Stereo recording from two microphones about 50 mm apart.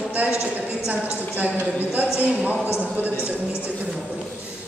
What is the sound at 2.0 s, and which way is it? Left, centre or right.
Speech, right.